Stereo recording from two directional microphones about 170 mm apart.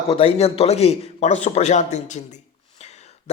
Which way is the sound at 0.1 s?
35° left (ahead or behind).